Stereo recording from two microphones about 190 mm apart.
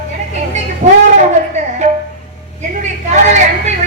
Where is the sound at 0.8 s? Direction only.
40° right (ahead or behind).